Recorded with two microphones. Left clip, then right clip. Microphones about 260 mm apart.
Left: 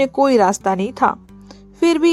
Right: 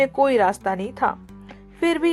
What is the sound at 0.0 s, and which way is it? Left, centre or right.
Speech, left.